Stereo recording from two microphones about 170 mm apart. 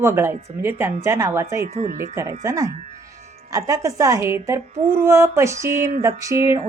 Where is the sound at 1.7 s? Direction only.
40° right (ahead or behind).